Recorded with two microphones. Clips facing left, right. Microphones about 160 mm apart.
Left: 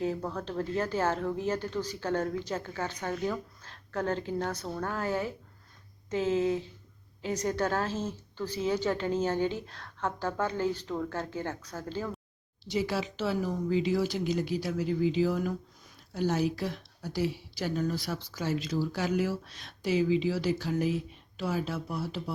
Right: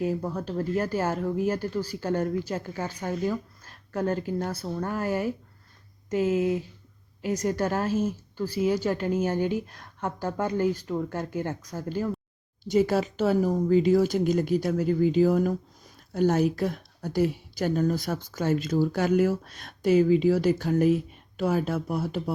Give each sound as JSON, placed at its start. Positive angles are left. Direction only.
{"t": 0.0, "sound": "speech", "side_deg": -10}
{"t": 12.6, "sound": "a woman's voice", "side_deg": -50}